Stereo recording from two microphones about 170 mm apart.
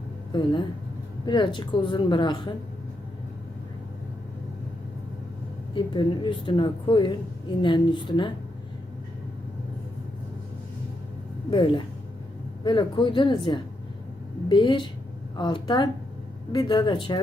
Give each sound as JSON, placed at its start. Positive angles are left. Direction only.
{"t": 0.3, "sound": "a woman's voice", "side_deg": 25}
{"t": 5.7, "sound": "a woman's voice", "side_deg": 30}
{"t": 11.5, "sound": "a woman's voice", "side_deg": 30}